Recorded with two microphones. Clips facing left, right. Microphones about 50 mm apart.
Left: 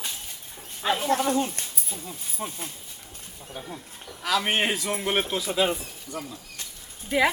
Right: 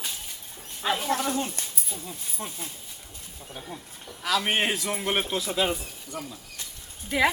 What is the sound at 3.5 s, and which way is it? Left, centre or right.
A woman's voice, centre.